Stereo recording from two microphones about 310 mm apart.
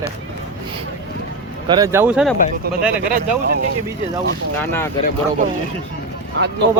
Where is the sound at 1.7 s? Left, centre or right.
Centre.